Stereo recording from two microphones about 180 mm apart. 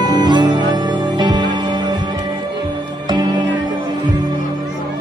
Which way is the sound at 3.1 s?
25° right (ahead or behind).